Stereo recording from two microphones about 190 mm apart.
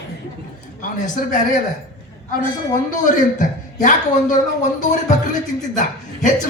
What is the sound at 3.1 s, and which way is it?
A man's voice, 40° left (ahead or behind).